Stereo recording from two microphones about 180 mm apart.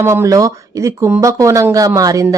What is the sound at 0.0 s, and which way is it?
Speech, 15° right (ahead or behind).